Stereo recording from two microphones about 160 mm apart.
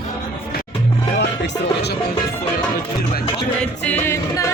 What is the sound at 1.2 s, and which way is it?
Speech, 90° left.